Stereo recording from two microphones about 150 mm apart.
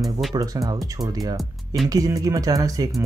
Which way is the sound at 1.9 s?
25° right (ahead or behind).